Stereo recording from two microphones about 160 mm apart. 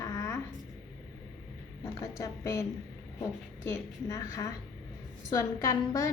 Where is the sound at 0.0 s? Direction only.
20° left (ahead or behind).